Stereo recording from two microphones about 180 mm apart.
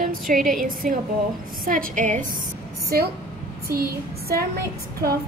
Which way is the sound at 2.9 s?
55° right (ahead or behind).